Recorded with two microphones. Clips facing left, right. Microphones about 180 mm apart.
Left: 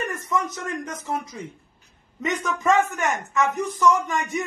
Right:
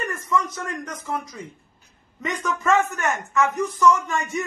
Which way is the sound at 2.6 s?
15° left (ahead or behind).